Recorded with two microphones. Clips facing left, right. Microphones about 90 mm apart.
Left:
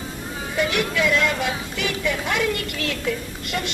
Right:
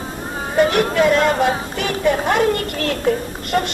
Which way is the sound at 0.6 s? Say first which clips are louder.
Right 7 dB; 45° right (ahead or behind).